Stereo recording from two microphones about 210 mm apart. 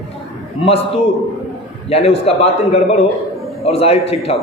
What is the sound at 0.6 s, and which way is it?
A man's voice, 30° left (ahead or behind).